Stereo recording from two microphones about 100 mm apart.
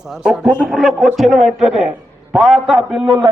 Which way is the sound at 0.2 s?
10° right (ahead or behind).